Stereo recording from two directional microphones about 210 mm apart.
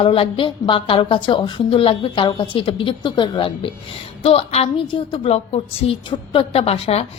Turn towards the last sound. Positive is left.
turn(degrees=30)  # may be behind; listen again after turning